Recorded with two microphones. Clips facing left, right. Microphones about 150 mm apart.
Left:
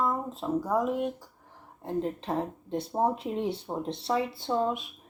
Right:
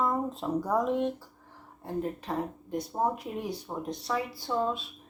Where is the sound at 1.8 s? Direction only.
20° left (ahead or behind).